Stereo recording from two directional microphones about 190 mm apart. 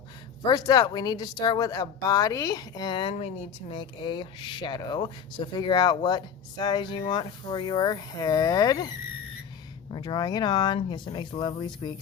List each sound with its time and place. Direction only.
0.4 s a woman's voice: 20° left (ahead or behind)
9.9 s a woman's voice: 25° left (ahead or behind)